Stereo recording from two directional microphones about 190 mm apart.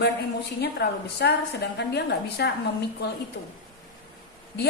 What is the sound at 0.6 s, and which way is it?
A woman's voice, 60° left (ahead or behind).